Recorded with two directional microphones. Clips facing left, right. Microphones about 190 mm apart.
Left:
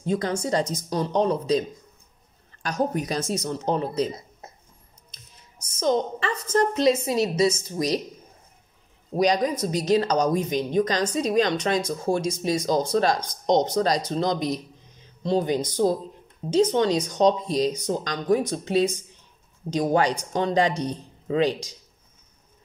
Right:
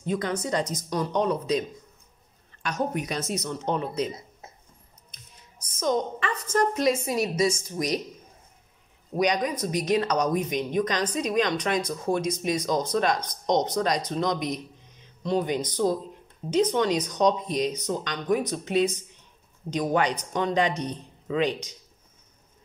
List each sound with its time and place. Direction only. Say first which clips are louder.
0.0 s speech: left 3 dB; 30° left (ahead or behind)
2.6 s speech: left 3 dB; 35° left (ahead or behind)
5.8 s speech: left 3 dB; 30° left (ahead or behind)
9.1 s speech: left 3 dB; 30° left (ahead or behind)